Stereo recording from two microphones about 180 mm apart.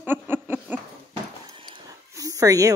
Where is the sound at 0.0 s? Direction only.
10° right (ahead or behind).